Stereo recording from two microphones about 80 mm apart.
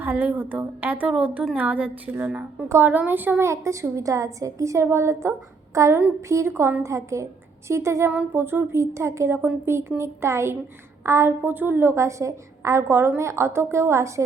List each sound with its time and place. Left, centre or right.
0.0 s a woman's voice: right
2.6 s a woman's voice: right
2.9 s a woman's voice: right
3.5 s a woman's voice: right
5.7 s a sound: right
6.2 s a woman's voice: right